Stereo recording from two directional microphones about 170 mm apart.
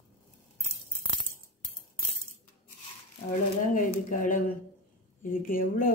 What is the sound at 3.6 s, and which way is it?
Speech, 50° left (ahead or behind).